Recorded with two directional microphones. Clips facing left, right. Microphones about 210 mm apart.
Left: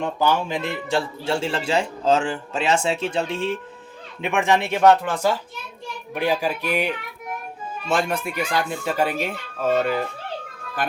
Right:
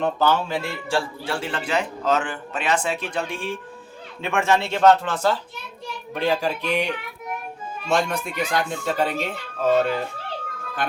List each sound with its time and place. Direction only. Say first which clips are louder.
0.0 s a man's voice: right 1 dB; 15° left (ahead or behind)